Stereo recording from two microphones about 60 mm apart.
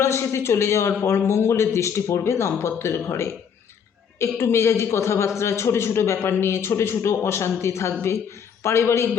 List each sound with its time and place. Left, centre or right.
0.0 s a man's voice: left